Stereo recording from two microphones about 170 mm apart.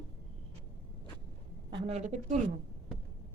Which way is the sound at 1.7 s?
35° right (ahead or behind).